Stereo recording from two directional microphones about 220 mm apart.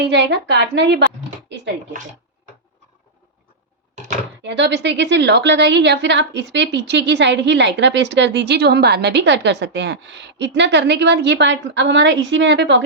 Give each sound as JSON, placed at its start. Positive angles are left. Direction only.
{"t": 0.0, "sound": "a woman's voice", "side_deg": -50}
{"t": 1.5, "sound": "a sound", "side_deg": -55}
{"t": 4.4, "sound": "a woman's voice", "side_deg": -55}